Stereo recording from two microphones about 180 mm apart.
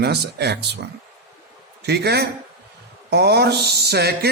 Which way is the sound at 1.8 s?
65° right (ahead or behind).